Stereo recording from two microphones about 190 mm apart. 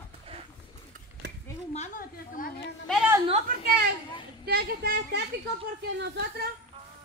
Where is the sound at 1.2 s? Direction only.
65° right (ahead or behind).